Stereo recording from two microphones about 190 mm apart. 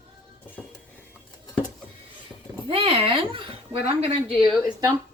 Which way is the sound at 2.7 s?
30° right (ahead or behind).